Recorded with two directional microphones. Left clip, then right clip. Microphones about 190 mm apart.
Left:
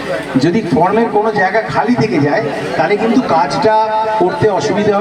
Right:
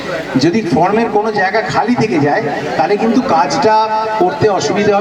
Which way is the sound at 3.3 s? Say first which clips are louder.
Right 1 dB; 20° right (ahead or behind).